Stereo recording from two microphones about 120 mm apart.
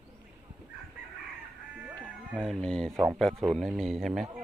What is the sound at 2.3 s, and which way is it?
Speech, 5° left (ahead or behind).